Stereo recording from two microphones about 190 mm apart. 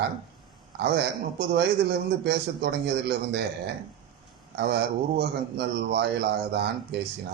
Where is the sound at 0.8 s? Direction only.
60° right (ahead or behind).